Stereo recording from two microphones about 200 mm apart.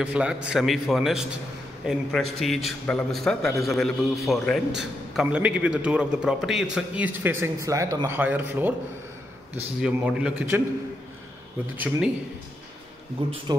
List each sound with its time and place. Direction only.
0.0 s a man's voice: 5° right (ahead or behind)
9.8 s a man's voice: 5° right (ahead or behind)
11.7 s speech: 10° right (ahead or behind)
13.2 s speech: 25° right (ahead or behind)